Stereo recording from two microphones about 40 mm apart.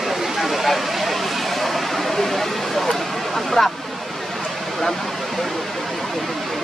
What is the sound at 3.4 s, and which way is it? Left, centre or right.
Speech, centre.